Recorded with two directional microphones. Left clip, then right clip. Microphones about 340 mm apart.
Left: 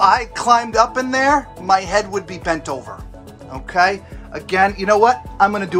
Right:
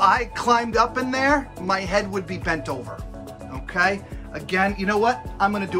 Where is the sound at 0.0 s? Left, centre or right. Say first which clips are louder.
Left 4 dB; centre.